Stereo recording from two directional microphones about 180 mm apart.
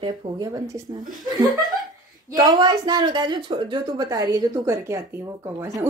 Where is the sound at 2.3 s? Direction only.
25° right (ahead or behind).